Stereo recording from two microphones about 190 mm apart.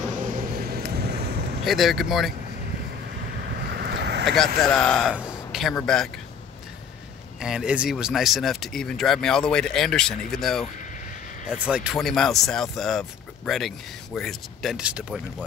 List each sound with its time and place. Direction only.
0.2 s vehicle: 50° right (ahead or behind)
1.6 s speech: centre (ahead or behind)
3.5 s vehicle: 55° right (ahead or behind)
4.6 s speech: centre (ahead or behind)
5.5 s a sound: centre (ahead or behind)
5.8 s speech: 5° left (ahead or behind)
7.3 s speech: 5° right (ahead or behind)